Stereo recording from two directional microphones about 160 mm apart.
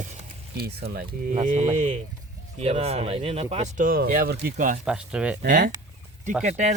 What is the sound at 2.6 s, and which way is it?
Speech, 40° right (ahead or behind).